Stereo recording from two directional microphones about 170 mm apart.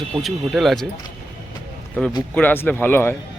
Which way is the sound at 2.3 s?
10° left (ahead or behind).